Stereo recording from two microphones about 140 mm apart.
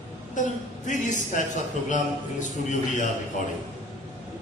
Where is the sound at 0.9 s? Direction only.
60° left (ahead or behind).